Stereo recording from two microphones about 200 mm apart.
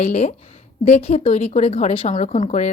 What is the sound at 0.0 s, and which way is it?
Speech, 35° left (ahead or behind).